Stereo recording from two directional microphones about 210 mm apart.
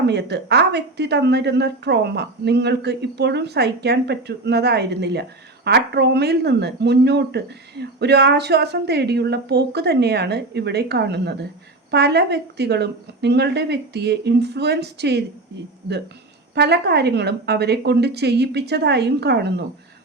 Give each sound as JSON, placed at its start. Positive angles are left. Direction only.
{"t": 0.0, "sound": "speech", "side_deg": -55}
{"t": 16.6, "sound": "speech", "side_deg": -50}